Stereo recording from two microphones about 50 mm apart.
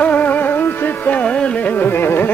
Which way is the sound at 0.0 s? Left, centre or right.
Left.